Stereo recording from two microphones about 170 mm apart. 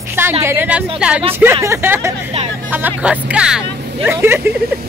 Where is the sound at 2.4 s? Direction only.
40° right (ahead or behind).